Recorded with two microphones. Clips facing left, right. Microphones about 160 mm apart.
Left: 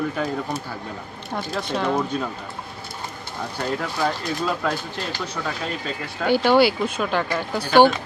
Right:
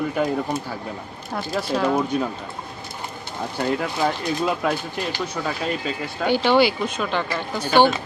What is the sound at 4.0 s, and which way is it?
Speech, 20° right (ahead or behind).